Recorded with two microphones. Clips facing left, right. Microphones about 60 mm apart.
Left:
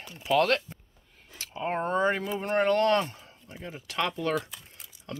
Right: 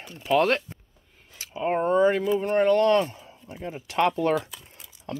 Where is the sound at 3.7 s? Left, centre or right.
Right.